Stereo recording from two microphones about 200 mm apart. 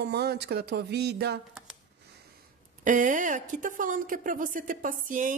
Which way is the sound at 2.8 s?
40° right (ahead or behind).